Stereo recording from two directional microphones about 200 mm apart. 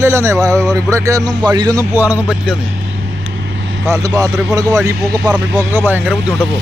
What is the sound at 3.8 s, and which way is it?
Speech, 15° right (ahead or behind).